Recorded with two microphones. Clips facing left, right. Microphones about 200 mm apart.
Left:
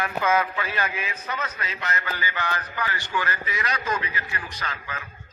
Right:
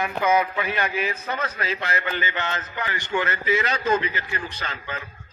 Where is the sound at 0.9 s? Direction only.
30° right (ahead or behind).